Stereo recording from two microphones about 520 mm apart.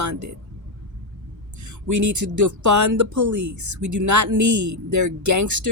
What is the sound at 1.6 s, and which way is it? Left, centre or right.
Speech, right.